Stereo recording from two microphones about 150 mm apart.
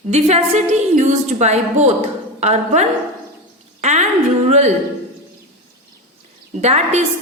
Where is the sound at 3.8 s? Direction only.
50° right (ahead or behind).